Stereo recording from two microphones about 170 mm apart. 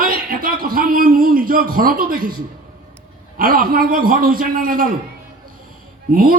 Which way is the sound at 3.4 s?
55° right (ahead or behind).